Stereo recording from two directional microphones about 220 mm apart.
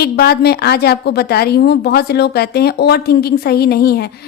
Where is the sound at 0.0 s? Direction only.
45° left (ahead or behind).